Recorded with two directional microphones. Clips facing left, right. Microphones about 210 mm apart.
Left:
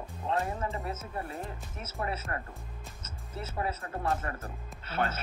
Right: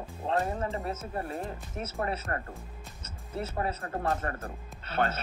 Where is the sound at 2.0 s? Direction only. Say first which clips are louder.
Right 2 dB; 40° right (ahead or behind).